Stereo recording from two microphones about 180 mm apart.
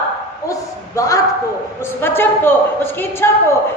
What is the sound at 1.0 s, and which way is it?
A woman's voice, 20° left (ahead or behind).